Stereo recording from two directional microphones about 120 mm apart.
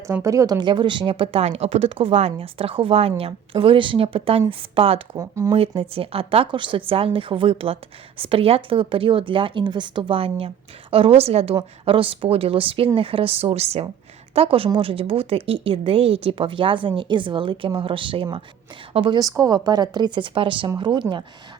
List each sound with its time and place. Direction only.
0.1 s speech: 25° right (ahead or behind); by 5.0 s 50° right (ahead or behind)
5.1 s speech: 25° right (ahead or behind)
5.5 s a woman's voice: 50° right (ahead or behind)
14.3 s speech: 50° right (ahead or behind)
19.4 s speech: 35° right (ahead or behind)